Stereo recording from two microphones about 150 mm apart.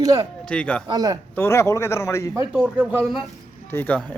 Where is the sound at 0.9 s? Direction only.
25° right (ahead or behind).